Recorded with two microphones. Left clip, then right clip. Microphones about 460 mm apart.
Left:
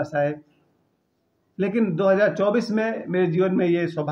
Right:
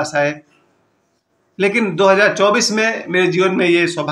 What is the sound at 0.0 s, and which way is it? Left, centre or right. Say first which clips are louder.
Speech: right 6 dB; left.